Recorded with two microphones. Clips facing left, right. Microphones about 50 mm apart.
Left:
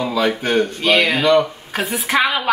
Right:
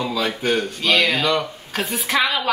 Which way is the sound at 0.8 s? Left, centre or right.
Centre.